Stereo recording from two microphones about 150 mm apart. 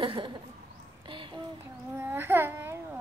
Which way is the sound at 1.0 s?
30° right (ahead or behind).